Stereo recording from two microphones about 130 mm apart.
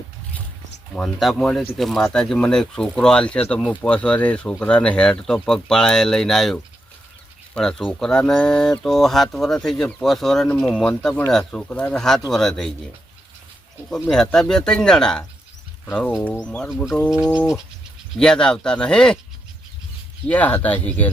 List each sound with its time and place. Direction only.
0.9 s speech: centre (ahead or behind)
13.9 s speech: 5° left (ahead or behind)
16.6 s speech: 5° right (ahead or behind)
18.2 s speech: 5° left (ahead or behind)
20.2 s speech: 10° left (ahead or behind)